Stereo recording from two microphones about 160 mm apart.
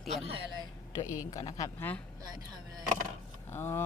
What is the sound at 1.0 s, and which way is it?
Speech, 20° left (ahead or behind).